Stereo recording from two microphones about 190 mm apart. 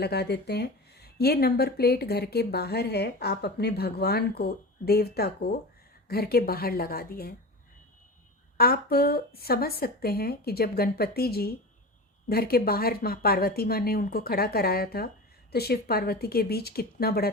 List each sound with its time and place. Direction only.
0.0 s a woman's voice: 55° left (ahead or behind)
8.5 s a woman's voice: 55° left (ahead or behind)